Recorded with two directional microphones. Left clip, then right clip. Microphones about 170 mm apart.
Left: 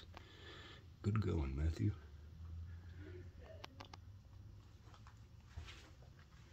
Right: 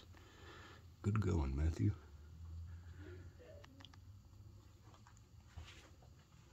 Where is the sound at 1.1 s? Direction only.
15° right (ahead or behind).